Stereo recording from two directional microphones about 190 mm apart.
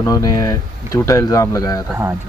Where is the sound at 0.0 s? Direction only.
20° left (ahead or behind).